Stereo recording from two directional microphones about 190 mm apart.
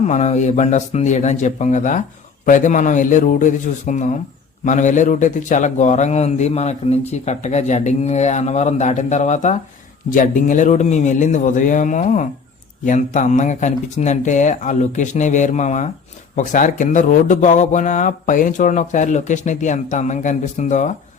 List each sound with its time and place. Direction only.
0.0 s a man's voice: 35° left (ahead or behind)